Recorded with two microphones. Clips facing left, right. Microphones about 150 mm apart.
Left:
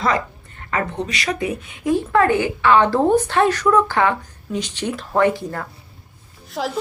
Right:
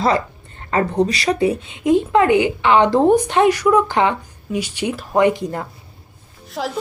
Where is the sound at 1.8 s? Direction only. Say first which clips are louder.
Right 3 dB; 20° right (ahead or behind).